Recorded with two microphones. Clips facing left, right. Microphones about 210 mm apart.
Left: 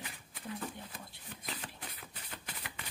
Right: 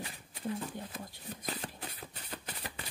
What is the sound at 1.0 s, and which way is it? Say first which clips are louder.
Shuffling cards: right 5 dB; 40° right (ahead or behind).